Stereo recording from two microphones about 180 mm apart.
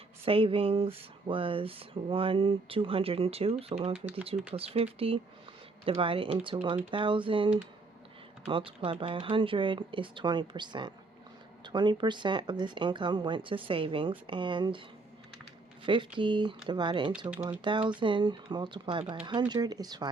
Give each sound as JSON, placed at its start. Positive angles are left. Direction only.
{"t": 0.3, "sound": "speech", "side_deg": -30}
{"t": 15.9, "sound": "speech", "side_deg": -25}